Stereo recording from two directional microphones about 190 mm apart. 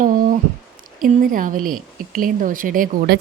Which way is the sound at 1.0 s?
45° right (ahead or behind).